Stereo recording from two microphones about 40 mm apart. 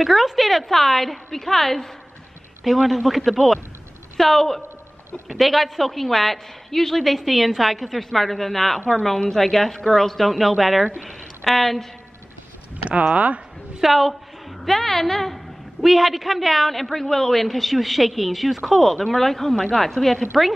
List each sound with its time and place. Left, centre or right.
0.0 s a woman's voice: centre
12.7 s speech: right
13.7 s a woman's voice: centre
14.6 s a woman's voice: centre